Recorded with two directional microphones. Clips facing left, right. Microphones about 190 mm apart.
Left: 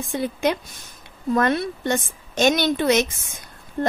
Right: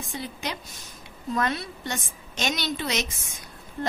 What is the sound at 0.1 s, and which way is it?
Speech, 55° left (ahead or behind).